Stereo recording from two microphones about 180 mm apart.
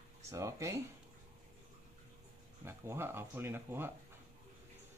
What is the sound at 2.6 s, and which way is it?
Speech, 15° right (ahead or behind).